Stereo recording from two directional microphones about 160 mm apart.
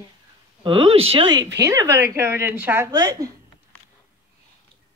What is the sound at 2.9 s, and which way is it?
Speech, 25° right (ahead or behind).